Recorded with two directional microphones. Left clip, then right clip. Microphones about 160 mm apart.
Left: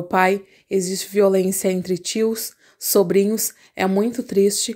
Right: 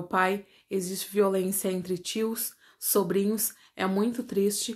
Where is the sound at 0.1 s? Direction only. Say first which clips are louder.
Left 8 dB; 45° left (ahead or behind).